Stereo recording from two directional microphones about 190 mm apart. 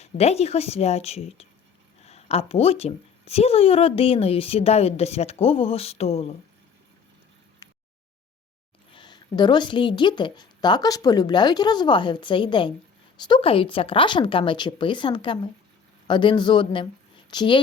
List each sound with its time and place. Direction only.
0.0 s a woman's voice: 35° left (ahead or behind)
8.9 s speech: 25° left (ahead or behind)